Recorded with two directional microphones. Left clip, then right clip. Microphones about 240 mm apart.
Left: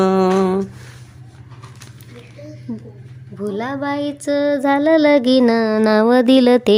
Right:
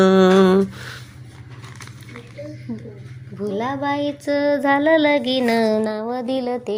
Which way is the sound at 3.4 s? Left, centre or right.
Centre.